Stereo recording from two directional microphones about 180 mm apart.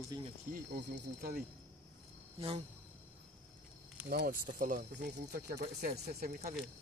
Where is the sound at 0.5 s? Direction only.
50° right (ahead or behind).